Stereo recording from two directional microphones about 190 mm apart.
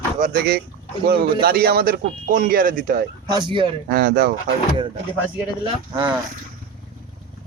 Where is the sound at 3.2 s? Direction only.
25° right (ahead or behind).